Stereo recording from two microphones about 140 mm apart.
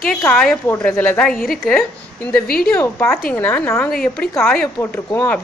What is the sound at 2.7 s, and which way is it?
A woman's voice, 15° left (ahead or behind).